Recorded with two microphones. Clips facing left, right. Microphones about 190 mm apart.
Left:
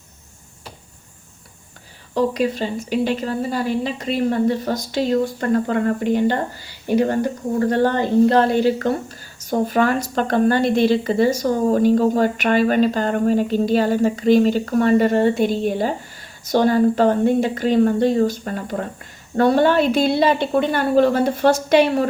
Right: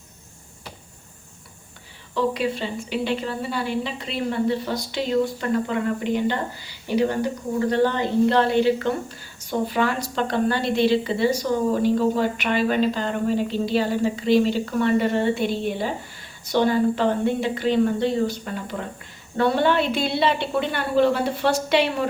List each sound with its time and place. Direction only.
2.1 s a woman's voice: 40° left (ahead or behind)